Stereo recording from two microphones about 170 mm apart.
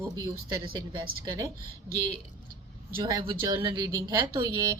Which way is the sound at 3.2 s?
25° right (ahead or behind).